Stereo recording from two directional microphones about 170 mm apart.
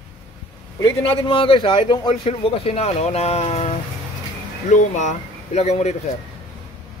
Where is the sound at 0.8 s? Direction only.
30° left (ahead or behind).